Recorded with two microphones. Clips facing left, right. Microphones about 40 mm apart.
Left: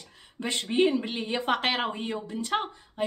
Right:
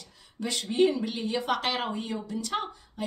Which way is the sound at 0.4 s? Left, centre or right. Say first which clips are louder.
Even; left.